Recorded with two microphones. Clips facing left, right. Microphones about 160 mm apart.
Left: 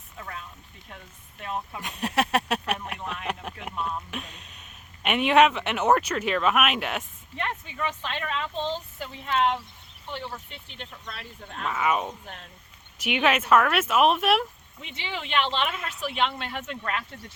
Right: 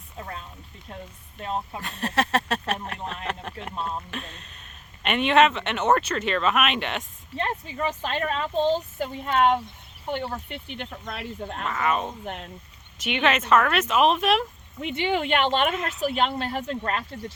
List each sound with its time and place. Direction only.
0.2 s a sound: 30° right (ahead or behind)
0.9 s speech: 30° right (ahead or behind)
1.8 s speech: 10° left (ahead or behind)
7.3 s speech: 35° right (ahead or behind); by 11.6 s 60° right (ahead or behind)
11.6 s speech: 10° left (ahead or behind)
12.2 s speech: 65° right (ahead or behind)
13.0 s speech: 10° left (ahead or behind)
14.8 s speech: 55° right (ahead or behind); by 17.3 s 35° right (ahead or behind)